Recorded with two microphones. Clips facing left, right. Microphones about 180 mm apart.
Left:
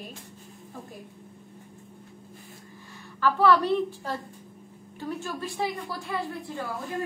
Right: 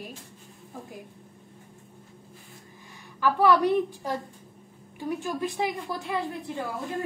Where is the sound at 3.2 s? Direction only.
15° right (ahead or behind).